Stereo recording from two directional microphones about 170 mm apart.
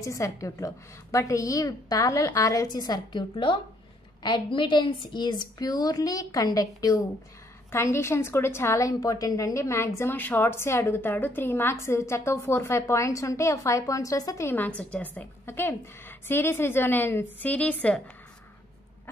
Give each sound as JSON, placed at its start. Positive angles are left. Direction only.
{"t": 0.0, "sound": "a woman's voice", "side_deg": 20}